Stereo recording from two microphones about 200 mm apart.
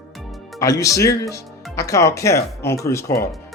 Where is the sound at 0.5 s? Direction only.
15° left (ahead or behind).